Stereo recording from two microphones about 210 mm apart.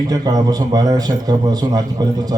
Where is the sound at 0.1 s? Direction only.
20° right (ahead or behind).